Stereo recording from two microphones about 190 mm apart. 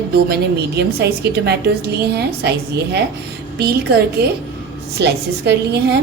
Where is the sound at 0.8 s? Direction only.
60° right (ahead or behind).